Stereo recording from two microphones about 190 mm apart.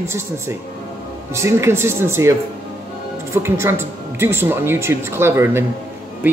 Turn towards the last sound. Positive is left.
turn(degrees=-15)  # may be behind; listen again after turning